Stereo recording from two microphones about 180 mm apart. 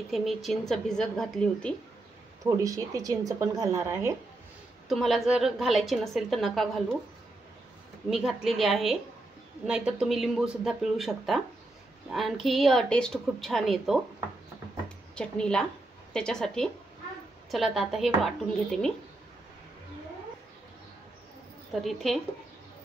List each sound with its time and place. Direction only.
0.1 s a woman's voice: centre (ahead or behind)
2.5 s a woman's voice: 20° right (ahead or behind)
4.8 s a woman's voice: centre (ahead or behind)
8.1 s a woman's voice: centre (ahead or behind)
15.1 s a woman's voice: 5° left (ahead or behind)
21.8 s a woman's voice: centre (ahead or behind)